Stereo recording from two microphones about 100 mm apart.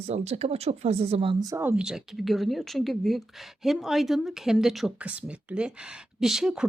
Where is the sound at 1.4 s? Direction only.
35° right (ahead or behind).